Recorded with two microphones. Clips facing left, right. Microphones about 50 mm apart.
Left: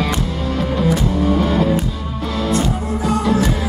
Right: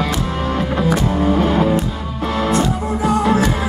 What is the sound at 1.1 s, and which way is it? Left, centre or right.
Music, right.